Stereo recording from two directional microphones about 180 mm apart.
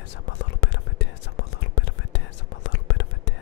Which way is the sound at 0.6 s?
90° left.